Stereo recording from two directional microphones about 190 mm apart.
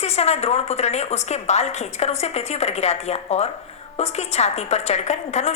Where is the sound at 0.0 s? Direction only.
35° left (ahead or behind).